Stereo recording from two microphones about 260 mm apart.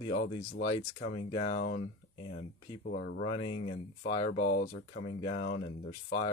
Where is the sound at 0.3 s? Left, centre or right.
Centre.